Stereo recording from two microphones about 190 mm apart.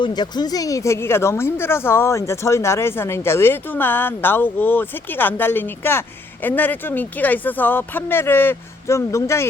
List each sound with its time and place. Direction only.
0.0 s speech: 20° left (ahead or behind)